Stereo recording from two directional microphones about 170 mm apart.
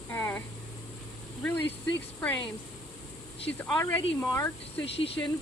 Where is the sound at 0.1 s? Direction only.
15° left (ahead or behind).